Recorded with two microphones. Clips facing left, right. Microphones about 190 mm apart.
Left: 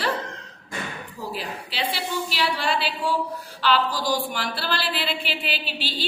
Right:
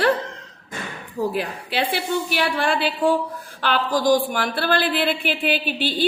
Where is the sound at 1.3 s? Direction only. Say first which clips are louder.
Right 6 dB; 55° right (ahead or behind).